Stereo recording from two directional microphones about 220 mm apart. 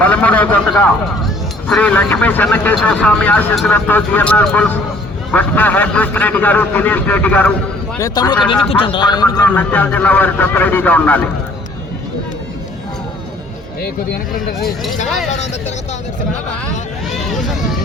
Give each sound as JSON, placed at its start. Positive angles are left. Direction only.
{"t": 0.0, "sound": "speech", "side_deg": 5}
{"t": 9.5, "sound": "speech", "side_deg": 10}
{"t": 17.2, "sound": "vehicle", "side_deg": 0}